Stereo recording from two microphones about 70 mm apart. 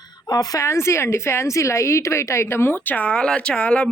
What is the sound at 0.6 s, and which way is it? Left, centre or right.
A woman's voice, left.